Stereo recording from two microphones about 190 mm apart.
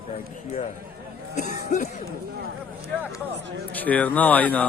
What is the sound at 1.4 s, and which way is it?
Speech, 40° left (ahead or behind).